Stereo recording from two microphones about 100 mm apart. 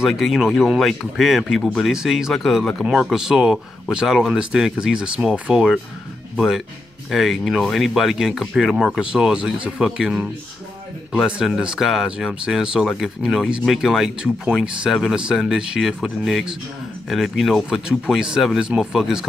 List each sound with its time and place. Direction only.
0.0 s speech: 5° right (ahead or behind)